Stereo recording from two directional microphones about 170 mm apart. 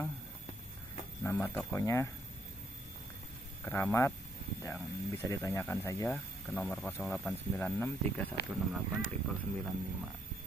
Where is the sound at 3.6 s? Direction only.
15° left (ahead or behind).